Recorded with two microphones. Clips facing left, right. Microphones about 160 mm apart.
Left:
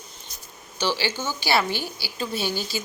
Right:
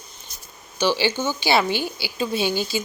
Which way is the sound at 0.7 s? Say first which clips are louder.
Right 5 dB; 15° right (ahead or behind).